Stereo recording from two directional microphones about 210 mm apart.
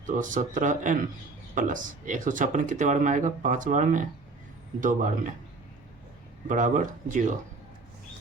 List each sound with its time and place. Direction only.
0.0 s speech: 40° right (ahead or behind)
6.5 s speech: 35° right (ahead or behind)